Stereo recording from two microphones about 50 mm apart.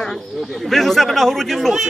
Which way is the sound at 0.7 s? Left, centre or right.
Centre.